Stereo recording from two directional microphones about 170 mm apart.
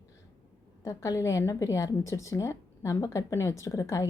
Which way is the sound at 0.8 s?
20° left (ahead or behind).